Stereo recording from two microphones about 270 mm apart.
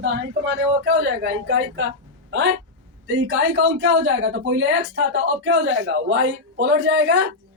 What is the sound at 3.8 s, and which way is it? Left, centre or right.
A man's voice, right.